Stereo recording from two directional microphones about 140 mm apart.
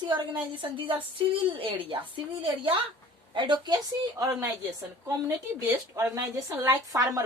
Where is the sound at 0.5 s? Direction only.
40° right (ahead or behind).